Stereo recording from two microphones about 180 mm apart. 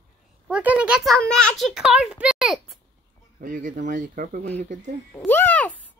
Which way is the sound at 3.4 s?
45° right (ahead or behind).